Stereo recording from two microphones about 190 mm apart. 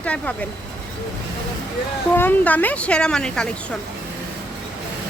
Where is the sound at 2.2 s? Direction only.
10° left (ahead or behind).